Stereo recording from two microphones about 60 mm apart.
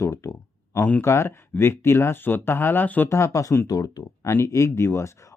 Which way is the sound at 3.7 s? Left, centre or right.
Left.